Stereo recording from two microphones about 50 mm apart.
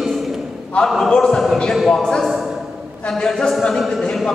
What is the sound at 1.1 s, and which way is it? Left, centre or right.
A man's voice, centre.